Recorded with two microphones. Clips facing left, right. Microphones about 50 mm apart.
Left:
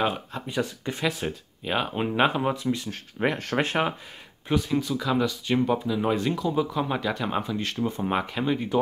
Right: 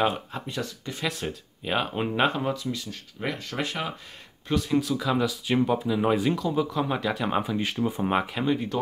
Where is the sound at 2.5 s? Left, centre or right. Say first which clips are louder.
Left 4 dB; left.